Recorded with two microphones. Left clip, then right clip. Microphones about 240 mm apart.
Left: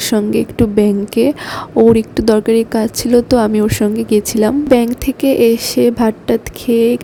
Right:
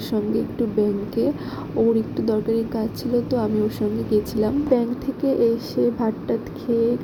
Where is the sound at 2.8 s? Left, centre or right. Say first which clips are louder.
Left 11 dB; left.